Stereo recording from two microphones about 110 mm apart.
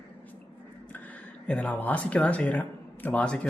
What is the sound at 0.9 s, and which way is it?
Speech, 15° left (ahead or behind).